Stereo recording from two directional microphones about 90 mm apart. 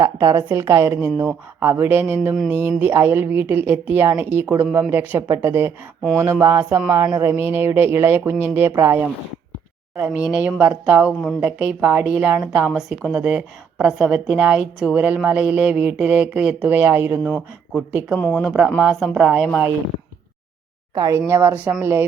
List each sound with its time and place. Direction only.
0.0 s a woman's voice: 35° right (ahead or behind)
18.4 s a woman's voice: 15° right (ahead or behind)
20.9 s speech: 45° right (ahead or behind)
21.2 s speech: 25° right (ahead or behind)